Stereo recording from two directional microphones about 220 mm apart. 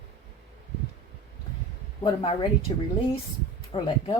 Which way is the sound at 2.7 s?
25° left (ahead or behind).